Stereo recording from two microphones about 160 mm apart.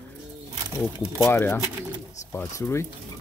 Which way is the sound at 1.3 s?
15° left (ahead or behind).